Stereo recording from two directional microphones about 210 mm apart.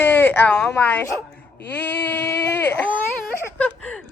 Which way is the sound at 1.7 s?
10° left (ahead or behind).